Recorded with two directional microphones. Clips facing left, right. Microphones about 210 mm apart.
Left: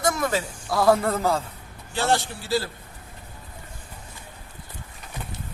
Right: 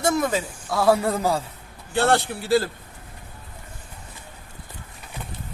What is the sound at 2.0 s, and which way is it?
Speech, 60° right (ahead or behind).